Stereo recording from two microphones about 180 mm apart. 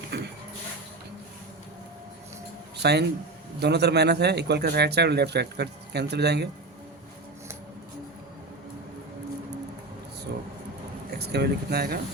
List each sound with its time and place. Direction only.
0.1 s a sound: 65° right (ahead or behind)
2.7 s speech: 65° right (ahead or behind)
11.2 s speech: 65° right (ahead or behind)